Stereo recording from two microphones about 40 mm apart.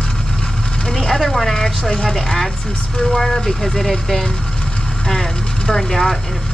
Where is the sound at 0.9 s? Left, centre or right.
Centre.